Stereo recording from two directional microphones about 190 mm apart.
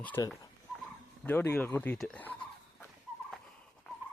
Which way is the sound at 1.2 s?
10° left (ahead or behind).